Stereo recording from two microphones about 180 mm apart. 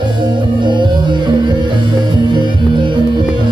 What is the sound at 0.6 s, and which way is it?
Music, 25° right (ahead or behind).